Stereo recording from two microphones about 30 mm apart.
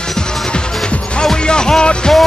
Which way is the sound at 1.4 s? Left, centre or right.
Left.